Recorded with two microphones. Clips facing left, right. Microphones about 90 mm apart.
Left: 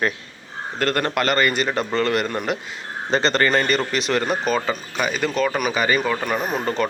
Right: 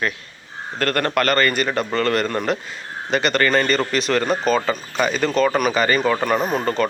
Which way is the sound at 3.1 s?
30° left (ahead or behind).